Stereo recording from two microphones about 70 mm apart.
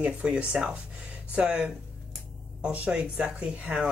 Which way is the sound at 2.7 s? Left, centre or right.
Right.